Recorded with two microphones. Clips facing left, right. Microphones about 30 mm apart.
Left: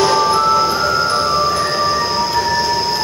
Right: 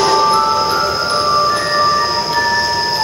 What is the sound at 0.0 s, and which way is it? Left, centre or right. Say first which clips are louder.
Music: right 1 dB; centre.